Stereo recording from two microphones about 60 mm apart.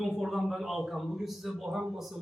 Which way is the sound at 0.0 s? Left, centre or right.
Centre.